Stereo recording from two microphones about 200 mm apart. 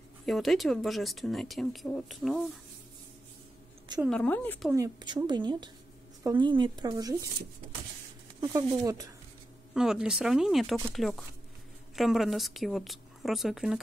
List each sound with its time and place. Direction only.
0.2 s speech: centre (ahead or behind)
4.1 s a woman's voice: 5° left (ahead or behind)
4.7 s speech: 20° right (ahead or behind)
8.4 s speech: 15° right (ahead or behind)
9.8 s speech: 5° right (ahead or behind)